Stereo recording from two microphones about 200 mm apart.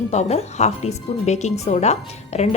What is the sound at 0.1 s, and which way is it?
A woman's voice, 35° left (ahead or behind).